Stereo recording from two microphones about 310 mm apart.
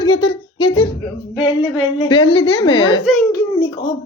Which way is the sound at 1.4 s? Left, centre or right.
Centre.